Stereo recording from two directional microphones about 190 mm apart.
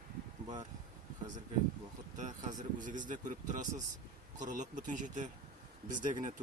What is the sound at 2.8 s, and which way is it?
A man's voice, 45° right (ahead or behind).